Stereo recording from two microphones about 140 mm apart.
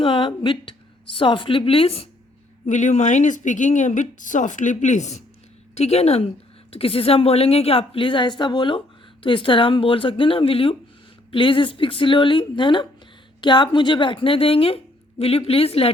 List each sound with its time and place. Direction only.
0.0 s speech: 40° left (ahead or behind)
2.6 s a woman's voice: 60° left (ahead or behind); by 15.9 s 45° left (ahead or behind)